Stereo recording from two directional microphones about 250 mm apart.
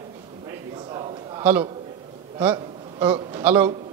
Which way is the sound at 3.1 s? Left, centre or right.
Centre.